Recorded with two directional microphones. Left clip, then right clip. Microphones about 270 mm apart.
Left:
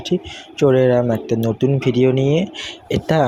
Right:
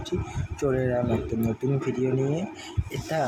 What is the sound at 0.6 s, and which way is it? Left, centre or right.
Speech, left.